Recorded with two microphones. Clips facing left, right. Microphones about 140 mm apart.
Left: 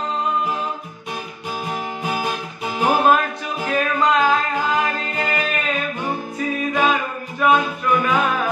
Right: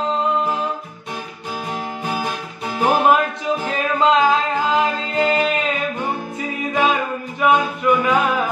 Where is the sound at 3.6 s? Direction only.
25° right (ahead or behind).